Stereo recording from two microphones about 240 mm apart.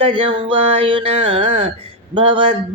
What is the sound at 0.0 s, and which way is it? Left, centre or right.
Speech, right.